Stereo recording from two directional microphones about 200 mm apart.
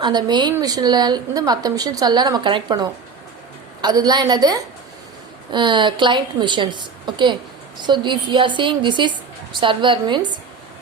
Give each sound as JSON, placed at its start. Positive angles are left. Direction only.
{"t": 0.0, "sound": "a woman's voice", "side_deg": -20}